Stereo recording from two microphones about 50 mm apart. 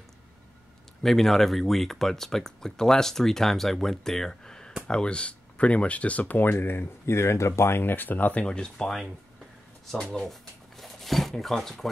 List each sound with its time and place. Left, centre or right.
1.0 s speech: centre
10.8 s zipper: centre